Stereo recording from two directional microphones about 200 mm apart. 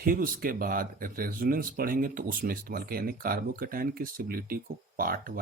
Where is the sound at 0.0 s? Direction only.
45° right (ahead or behind).